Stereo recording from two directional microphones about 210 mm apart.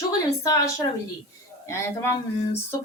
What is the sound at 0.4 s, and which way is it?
Speech, 15° left (ahead or behind).